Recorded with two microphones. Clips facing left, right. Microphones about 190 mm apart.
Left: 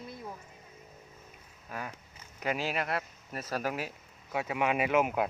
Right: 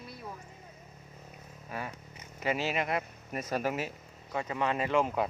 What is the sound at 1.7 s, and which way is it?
Speech, centre (ahead or behind).